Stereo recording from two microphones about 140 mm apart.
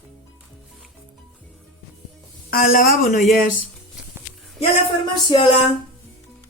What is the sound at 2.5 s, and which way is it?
Speech, 90° left.